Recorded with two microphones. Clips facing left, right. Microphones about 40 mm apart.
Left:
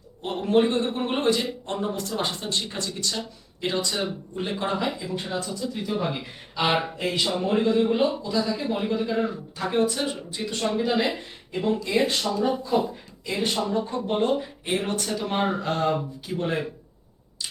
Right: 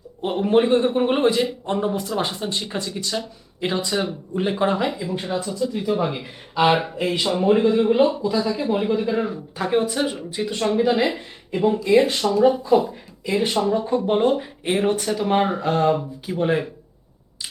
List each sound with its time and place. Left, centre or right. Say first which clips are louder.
0.2 s a man's voice: right 3 dB; centre
4.9 s a man's voice: right 4 dB; centre